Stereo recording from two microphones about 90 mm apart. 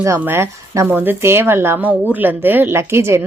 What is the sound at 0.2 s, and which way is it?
A woman's voice, 25° right (ahead or behind).